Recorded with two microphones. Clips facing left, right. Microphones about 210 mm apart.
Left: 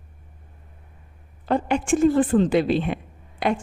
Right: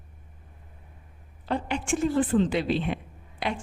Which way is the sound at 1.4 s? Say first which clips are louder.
Left 7 dB; 50° left (ahead or behind).